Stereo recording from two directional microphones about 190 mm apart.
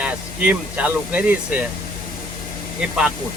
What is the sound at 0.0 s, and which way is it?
Speech, 5° right (ahead or behind).